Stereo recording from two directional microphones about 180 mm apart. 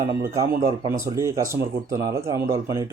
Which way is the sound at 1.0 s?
15° right (ahead or behind).